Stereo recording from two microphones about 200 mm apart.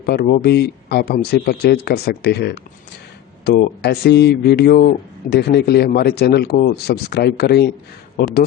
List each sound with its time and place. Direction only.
0.0 s a man's voice: 50° left (ahead or behind)